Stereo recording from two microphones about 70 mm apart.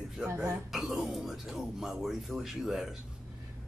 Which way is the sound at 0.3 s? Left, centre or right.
Right.